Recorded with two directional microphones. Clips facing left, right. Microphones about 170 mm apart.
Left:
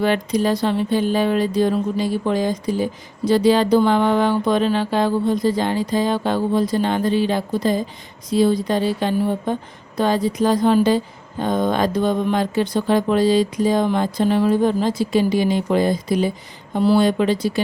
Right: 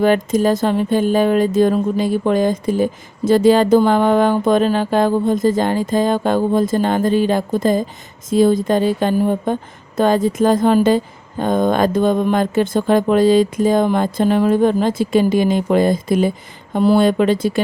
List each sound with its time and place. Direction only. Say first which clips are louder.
0.0 s speech: right 4 dB; 45° right (ahead or behind)